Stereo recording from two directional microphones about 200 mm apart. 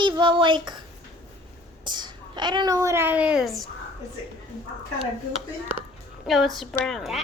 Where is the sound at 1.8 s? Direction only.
20° right (ahead or behind); by 3.7 s centre (ahead or behind).